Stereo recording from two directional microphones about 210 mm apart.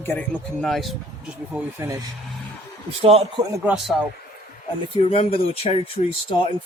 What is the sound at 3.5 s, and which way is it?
Speech, 5° right (ahead or behind).